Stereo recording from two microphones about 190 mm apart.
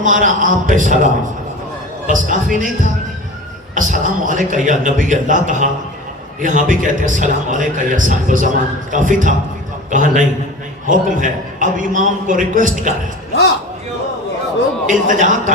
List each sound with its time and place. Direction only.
0.0 s a man's voice: 40° right (ahead or behind)
2.0 s a man's voice: 45° right (ahead or behind)
14.8 s a man's voice: 45° right (ahead or behind)